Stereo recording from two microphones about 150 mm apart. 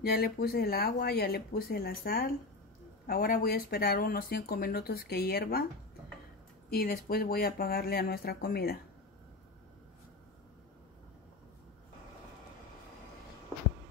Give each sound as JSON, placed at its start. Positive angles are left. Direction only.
{"t": 0.0, "sound": "speech", "side_deg": 90}
{"t": 3.1, "sound": "speech", "side_deg": 75}
{"t": 6.7, "sound": "speech", "side_deg": 90}